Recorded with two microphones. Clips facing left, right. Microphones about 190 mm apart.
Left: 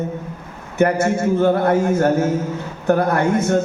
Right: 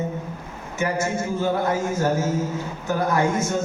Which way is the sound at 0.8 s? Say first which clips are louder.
Left 8 dB; 60° left (ahead or behind).